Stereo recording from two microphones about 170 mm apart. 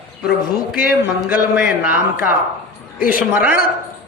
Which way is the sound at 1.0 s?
10° right (ahead or behind).